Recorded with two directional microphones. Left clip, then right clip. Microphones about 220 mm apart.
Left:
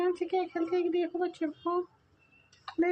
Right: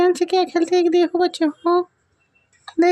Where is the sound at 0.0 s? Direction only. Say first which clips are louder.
Right 13 dB; 55° right (ahead or behind).